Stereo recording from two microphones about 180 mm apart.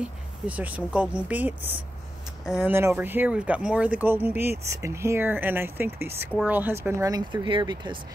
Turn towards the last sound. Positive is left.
turn(degrees=-25)  # may be behind; listen again after turning